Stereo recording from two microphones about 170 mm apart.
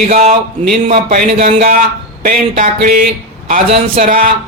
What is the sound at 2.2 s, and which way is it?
Speech, 55° right (ahead or behind).